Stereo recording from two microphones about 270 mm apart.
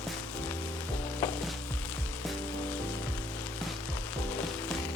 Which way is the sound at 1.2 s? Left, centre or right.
Centre.